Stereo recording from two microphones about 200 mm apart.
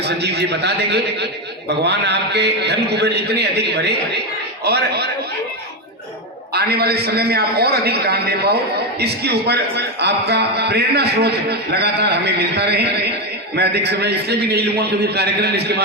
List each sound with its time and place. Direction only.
0.0 s a man's voice: 55° right (ahead or behind)
6.5 s a man's voice: 55° right (ahead or behind)